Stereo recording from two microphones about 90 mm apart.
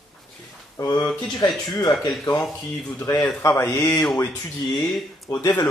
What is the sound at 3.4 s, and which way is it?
Speech, 30° left (ahead or behind).